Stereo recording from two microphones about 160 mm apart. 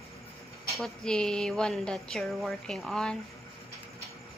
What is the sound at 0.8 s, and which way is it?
A woman's voice, 5° left (ahead or behind).